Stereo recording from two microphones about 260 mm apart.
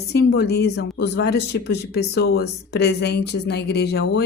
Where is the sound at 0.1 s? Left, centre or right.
Left.